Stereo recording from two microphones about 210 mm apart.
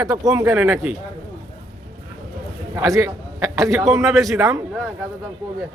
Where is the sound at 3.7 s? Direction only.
Centre (ahead or behind).